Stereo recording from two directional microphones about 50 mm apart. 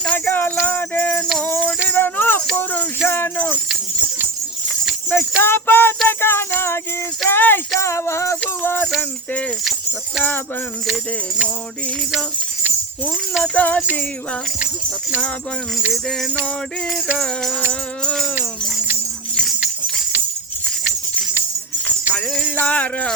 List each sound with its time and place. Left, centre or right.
0.3 s music: left
5.1 s music: left
7.8 s music: left
8.6 s music: left
13.4 s music: left
22.1 s jingle bell: left
22.4 s music: left